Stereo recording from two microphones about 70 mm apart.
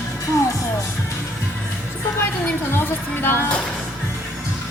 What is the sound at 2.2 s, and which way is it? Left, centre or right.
A woman's voice, left.